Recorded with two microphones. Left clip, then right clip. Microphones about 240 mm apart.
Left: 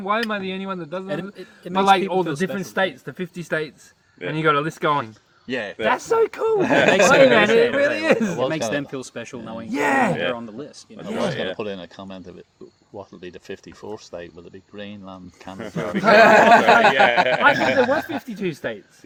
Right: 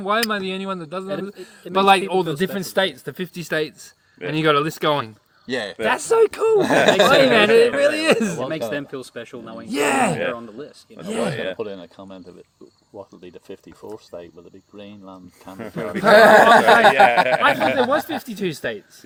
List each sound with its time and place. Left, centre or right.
0.0 s speech: right
5.5 s speech: right
7.3 s speech: right
8.4 s speech: left
9.7 s speech: right
10.3 s speech: left
11.3 s speech: right
11.5 s speech: left
13.8 s speech: left
15.5 s speech: right
18.2 s speech: right